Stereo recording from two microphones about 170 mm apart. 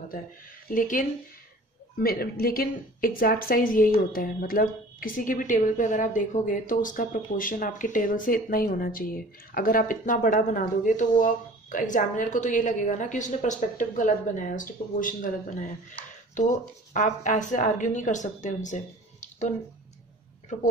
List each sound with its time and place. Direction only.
0.7 s a woman's voice: 55° left (ahead or behind)